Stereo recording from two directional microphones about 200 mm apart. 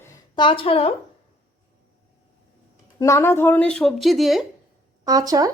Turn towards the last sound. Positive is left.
turn(degrees=-20)  # may be behind; listen again after turning